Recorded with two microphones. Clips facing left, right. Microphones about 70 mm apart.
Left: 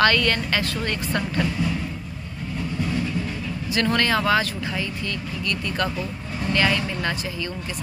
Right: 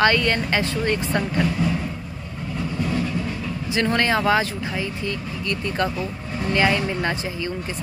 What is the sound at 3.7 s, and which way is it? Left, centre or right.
Speech, right.